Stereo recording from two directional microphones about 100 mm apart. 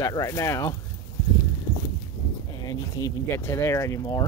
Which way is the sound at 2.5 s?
40° left (ahead or behind).